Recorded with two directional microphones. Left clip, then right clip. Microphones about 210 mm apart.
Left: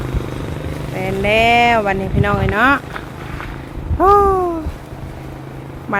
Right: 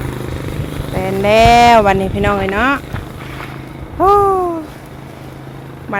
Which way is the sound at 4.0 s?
Centre (ahead or behind).